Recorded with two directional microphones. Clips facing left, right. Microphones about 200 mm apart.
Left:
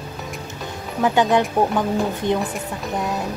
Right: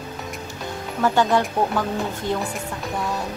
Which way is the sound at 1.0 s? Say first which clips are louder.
Left 2 dB; 15° left (ahead or behind).